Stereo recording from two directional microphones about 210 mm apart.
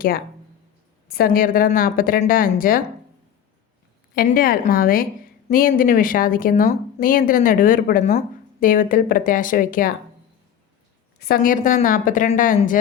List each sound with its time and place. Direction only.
1.0 s a woman's voice: 45° left (ahead or behind)
4.1 s a woman's voice: 45° left (ahead or behind)
11.2 s speech: 45° left (ahead or behind)